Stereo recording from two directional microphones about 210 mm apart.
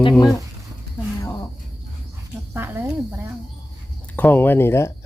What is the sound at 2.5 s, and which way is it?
Speech, 10° right (ahead or behind).